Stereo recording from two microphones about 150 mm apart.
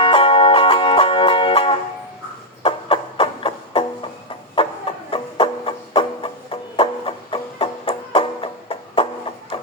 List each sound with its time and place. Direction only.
0.0 s music: 35° left (ahead or behind)
2.6 s a sound: 35° left (ahead or behind)
4.6 s chicken: 40° left (ahead or behind)
5.1 s music: 35° left (ahead or behind)